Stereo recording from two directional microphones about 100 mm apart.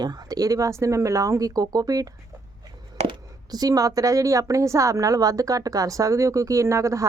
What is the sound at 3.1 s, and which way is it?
Speech, 40° right (ahead or behind).